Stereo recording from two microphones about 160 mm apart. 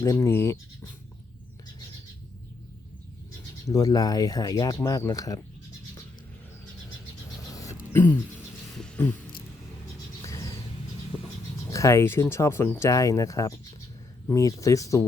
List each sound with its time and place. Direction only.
0.0 s speech: 20° left (ahead or behind)
3.7 s speech: 20° left (ahead or behind)
7.5 s a sound: 20° left (ahead or behind)
11.7 s speech: 20° left (ahead or behind)